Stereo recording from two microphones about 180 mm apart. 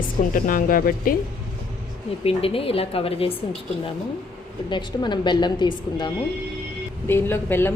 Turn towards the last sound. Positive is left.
turn(degrees=10)  # may be behind; listen again after turning